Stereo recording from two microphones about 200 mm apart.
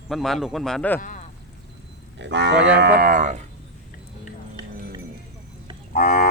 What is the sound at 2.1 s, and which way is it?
Cattle, 60° right (ahead or behind).